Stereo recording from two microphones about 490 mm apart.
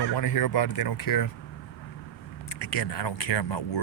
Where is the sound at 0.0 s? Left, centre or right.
Left.